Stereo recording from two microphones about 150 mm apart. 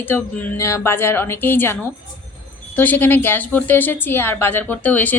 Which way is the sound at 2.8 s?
10° left (ahead or behind).